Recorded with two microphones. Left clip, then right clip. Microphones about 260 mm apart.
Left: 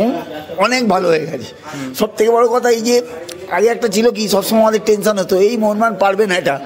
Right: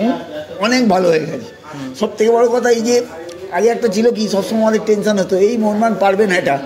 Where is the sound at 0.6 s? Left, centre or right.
Left.